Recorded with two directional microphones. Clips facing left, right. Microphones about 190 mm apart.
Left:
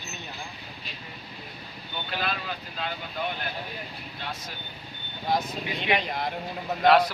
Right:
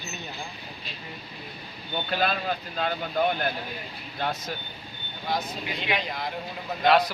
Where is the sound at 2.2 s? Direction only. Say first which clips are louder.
Right 5 dB; 45° right (ahead or behind).